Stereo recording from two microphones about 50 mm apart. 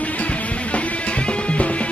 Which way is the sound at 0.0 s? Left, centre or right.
Left.